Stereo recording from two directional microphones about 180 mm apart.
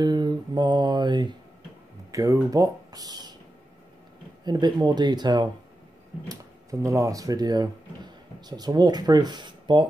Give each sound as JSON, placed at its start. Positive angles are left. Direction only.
{"t": 0.0, "sound": "mantra", "side_deg": -25}
{"t": 2.1, "sound": "speech", "side_deg": -20}
{"t": 4.5, "sound": "speech", "side_deg": -25}